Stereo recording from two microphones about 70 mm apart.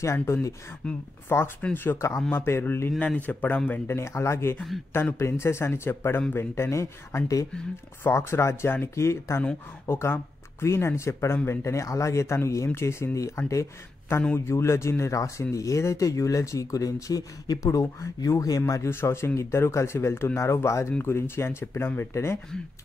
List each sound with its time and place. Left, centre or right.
0.0 s speech: left
0.8 s speech: centre
1.6 s speech: left
3.8 s speech: left
18.9 s speech: left